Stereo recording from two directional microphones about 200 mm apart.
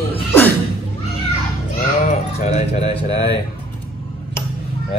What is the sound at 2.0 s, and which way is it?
Speech, 35° left (ahead or behind).